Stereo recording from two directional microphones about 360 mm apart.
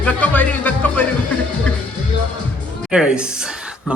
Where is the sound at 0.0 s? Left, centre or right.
Centre.